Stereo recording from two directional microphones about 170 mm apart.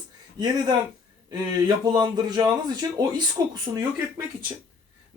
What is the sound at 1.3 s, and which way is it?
Speech, 25° right (ahead or behind).